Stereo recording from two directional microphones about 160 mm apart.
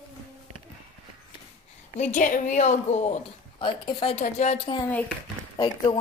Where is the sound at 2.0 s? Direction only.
55° left (ahead or behind); by 4.1 s 30° left (ahead or behind).